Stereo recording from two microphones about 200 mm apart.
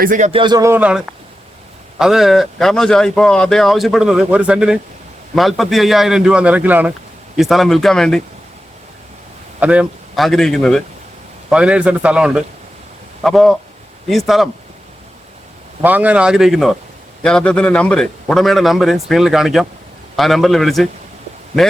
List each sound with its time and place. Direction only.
0.0 s a man's voice: 40° right (ahead or behind)
0.3 s speech: 25° right (ahead or behind); by 8.2 s 5° left (ahead or behind)
9.6 s speech: 5° right (ahead or behind)
15.8 s speech: 10° right (ahead or behind)